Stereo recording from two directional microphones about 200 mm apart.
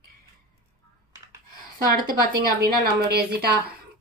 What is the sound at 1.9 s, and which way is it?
A woman's voice, 45° right (ahead or behind).